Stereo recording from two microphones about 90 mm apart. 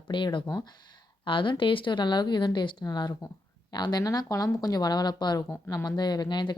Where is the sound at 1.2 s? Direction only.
65° left (ahead or behind).